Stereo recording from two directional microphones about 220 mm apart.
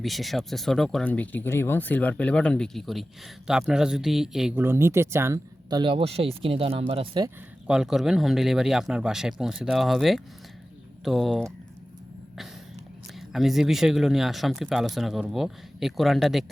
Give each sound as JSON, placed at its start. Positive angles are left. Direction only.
{"t": 0.0, "sound": "speech", "side_deg": 0}
{"t": 7.7, "sound": "speech", "side_deg": 0}
{"t": 13.1, "sound": "speech", "side_deg": 0}